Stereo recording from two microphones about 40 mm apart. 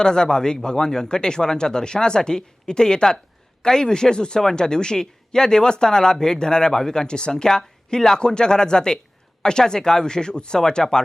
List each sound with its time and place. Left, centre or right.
0.0 s speech: centre